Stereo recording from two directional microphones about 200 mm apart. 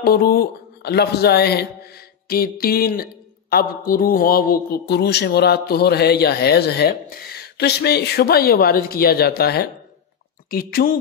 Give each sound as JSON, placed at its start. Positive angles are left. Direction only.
{"t": 0.0, "sound": "speech", "side_deg": 50}